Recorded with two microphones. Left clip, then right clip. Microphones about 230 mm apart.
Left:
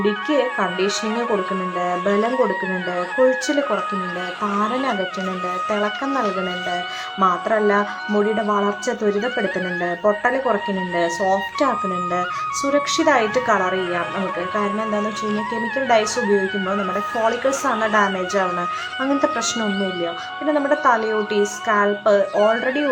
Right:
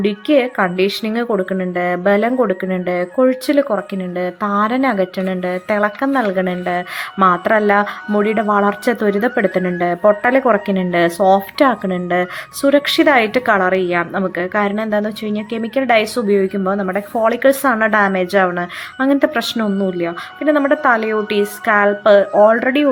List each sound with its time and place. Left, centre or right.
0.0 s speech: centre
12.7 s speech: right